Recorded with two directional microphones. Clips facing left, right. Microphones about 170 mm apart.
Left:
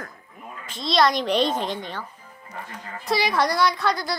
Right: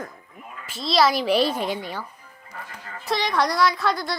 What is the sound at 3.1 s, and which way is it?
A woman's voice, 5° left (ahead or behind).